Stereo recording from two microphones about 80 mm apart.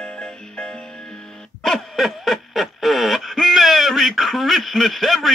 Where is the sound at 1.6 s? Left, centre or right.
Centre.